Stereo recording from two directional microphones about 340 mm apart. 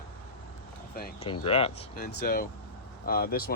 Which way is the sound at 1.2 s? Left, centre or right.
Centre.